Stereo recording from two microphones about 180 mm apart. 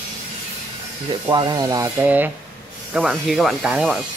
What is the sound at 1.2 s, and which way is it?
Speech, 25° right (ahead or behind).